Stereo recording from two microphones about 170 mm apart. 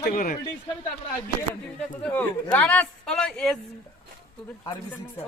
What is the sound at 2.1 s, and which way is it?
Speech, 10° left (ahead or behind).